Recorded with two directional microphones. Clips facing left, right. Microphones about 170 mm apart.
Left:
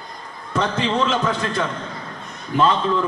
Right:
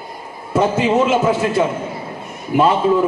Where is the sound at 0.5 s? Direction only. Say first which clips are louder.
Right 6 dB; 10° right (ahead or behind).